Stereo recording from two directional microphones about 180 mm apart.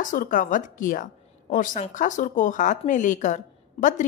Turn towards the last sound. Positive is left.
turn(degrees=45)  # may be behind; listen again after turning